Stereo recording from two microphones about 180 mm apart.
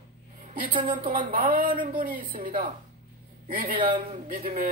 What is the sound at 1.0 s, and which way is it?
Speech, 50° right (ahead or behind).